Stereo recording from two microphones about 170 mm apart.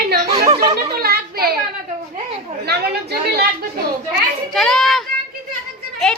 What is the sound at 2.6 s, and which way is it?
Speech, 70° right (ahead or behind).